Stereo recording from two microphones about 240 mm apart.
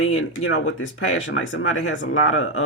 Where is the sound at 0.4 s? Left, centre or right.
Left.